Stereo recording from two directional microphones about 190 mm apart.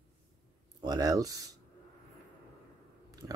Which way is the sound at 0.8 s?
20° right (ahead or behind).